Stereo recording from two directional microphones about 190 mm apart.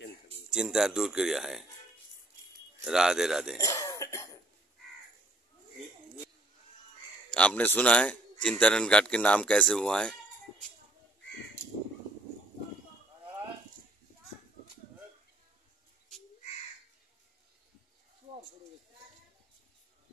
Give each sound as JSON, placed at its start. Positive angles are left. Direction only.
{"t": 0.5, "sound": "a man's voice", "side_deg": -5}
{"t": 2.8, "sound": "a man's voice", "side_deg": 0}
{"t": 3.5, "sound": "throat clearing", "side_deg": 20}
{"t": 7.2, "sound": "a man's voice", "side_deg": 5}